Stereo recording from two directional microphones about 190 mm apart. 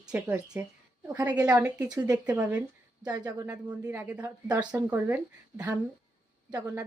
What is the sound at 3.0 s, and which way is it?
Speech, 20° right (ahead or behind).